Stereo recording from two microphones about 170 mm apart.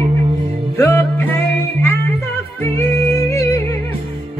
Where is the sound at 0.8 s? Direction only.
15° left (ahead or behind).